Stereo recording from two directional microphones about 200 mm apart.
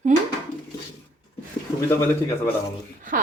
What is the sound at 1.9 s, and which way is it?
Speech, 10° left (ahead or behind).